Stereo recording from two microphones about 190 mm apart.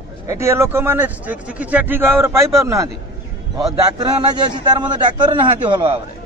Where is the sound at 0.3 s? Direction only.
15° right (ahead or behind).